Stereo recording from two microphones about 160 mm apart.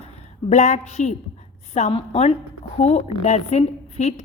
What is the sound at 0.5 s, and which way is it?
A woman's voice, 45° left (ahead or behind).